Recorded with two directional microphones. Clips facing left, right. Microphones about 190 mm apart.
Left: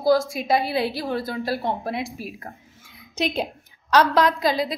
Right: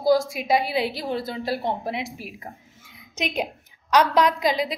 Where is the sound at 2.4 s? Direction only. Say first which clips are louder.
Even; 15° right (ahead or behind).